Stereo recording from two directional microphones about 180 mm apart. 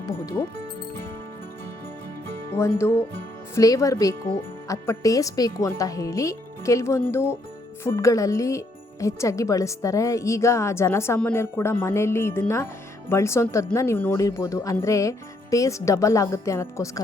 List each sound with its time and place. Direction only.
0.0 s speech: 15° left (ahead or behind)
2.5 s speech: 15° left (ahead or behind)